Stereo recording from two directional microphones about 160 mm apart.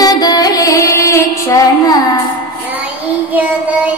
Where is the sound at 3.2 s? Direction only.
10° right (ahead or behind).